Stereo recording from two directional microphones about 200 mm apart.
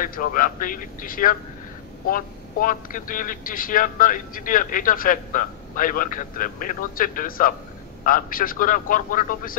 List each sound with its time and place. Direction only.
0.0 s a man's voice: 45° left (ahead or behind)